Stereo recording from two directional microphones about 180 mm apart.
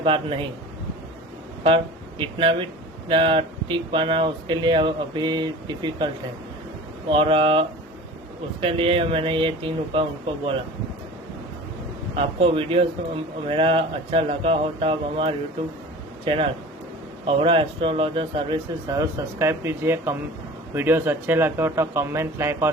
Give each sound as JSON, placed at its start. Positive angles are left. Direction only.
{"t": 0.0, "sound": "speech", "side_deg": -30}
{"t": 1.6, "sound": "speech", "side_deg": -30}
{"t": 7.1, "sound": "speech", "side_deg": -30}
{"t": 8.6, "sound": "speech", "side_deg": -30}
{"t": 12.1, "sound": "speech", "side_deg": -30}